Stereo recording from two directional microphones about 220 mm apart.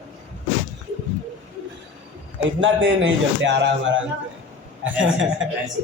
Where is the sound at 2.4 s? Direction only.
60° right (ahead or behind).